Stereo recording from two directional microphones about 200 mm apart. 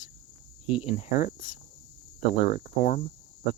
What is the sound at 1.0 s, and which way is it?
Speech, 35° left (ahead or behind).